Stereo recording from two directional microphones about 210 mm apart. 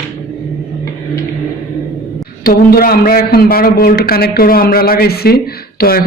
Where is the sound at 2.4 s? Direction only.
45° left (ahead or behind).